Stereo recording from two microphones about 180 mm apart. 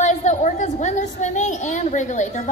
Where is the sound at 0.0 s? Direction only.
40° left (ahead or behind).